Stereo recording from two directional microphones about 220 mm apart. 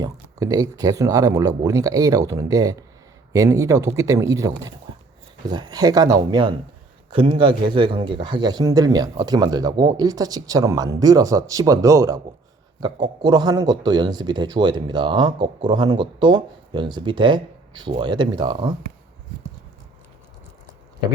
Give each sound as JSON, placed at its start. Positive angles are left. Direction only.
{"t": 0.0, "sound": "a man's voice", "side_deg": -15}